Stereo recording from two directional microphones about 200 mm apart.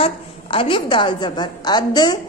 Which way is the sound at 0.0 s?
30° left (ahead or behind).